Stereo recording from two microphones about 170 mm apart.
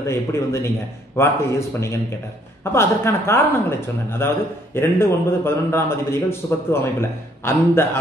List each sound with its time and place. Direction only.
0.0 s a man's voice: 15° left (ahead or behind)